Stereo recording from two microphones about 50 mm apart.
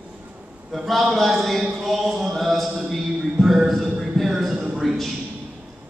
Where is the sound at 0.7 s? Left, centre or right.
Centre.